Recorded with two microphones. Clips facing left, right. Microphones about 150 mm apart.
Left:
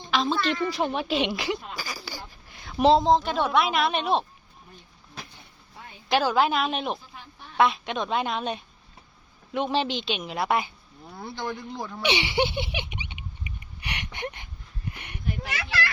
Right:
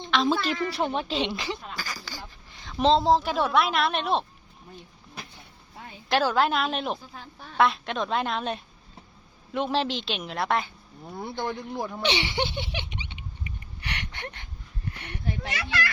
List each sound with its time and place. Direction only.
0.4 s speech: centre (ahead or behind)
2.6 s a sound: 10° left (ahead or behind)
3.0 s a woman's voice: 5° right (ahead or behind)
6.1 s a woman's voice: centre (ahead or behind)
11.2 s speech: 20° right (ahead or behind)
12.0 s a sound: 10° left (ahead or behind)